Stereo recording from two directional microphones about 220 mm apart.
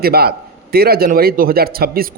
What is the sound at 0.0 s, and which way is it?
A man's voice, 45° right (ahead or behind).